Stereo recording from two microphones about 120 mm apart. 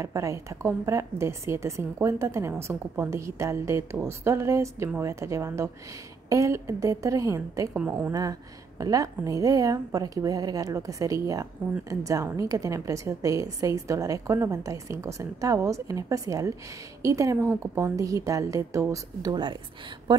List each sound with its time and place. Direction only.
0.0 s a woman's voice: 25° right (ahead or behind)
7.7 s a woman's voice: 15° right (ahead or behind)
8.1 s a woman's voice: 30° right (ahead or behind)
20.1 s speech: 40° right (ahead or behind)